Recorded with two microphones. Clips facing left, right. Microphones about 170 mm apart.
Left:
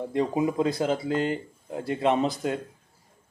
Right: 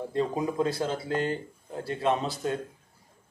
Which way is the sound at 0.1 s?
15° left (ahead or behind).